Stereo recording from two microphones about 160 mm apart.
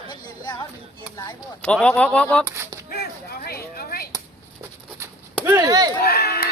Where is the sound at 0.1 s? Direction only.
25° left (ahead or behind).